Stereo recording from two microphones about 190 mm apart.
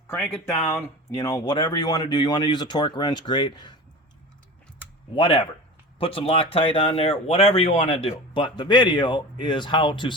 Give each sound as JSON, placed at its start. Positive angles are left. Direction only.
{"t": 0.4, "sound": "speech", "side_deg": 15}
{"t": 5.1, "sound": "speech", "side_deg": 30}